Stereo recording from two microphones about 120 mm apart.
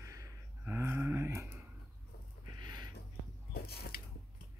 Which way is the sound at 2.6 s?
35° right (ahead or behind).